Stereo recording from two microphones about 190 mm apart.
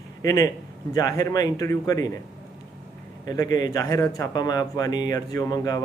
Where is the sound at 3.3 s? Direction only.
20° left (ahead or behind).